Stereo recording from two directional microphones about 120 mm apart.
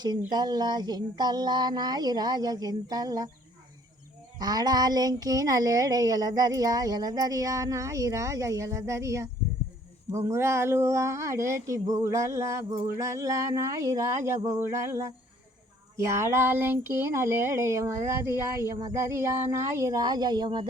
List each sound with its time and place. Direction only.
0.3 s speech: 35° right (ahead or behind)
4.4 s speech: 30° right (ahead or behind)